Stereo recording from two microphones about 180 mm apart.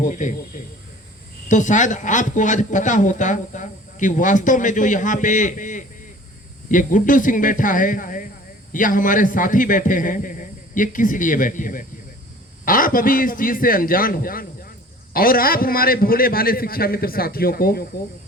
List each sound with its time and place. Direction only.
0.0 s a man's voice: 45° left (ahead or behind)